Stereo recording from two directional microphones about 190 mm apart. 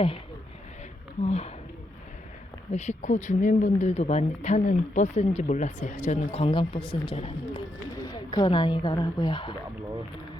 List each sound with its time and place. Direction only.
1.2 s speech: 35° left (ahead or behind)
2.7 s speech: 35° left (ahead or behind)